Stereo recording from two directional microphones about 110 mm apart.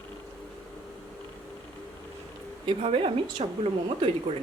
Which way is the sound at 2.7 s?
55° right (ahead or behind).